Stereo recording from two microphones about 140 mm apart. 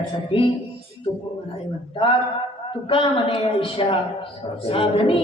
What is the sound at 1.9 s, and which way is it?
A woman's voice, 40° left (ahead or behind).